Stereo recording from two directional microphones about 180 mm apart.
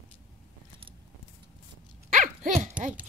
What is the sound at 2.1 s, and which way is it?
Dog, 45° right (ahead or behind).